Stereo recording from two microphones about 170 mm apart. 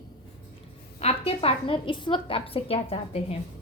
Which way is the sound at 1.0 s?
35° left (ahead or behind).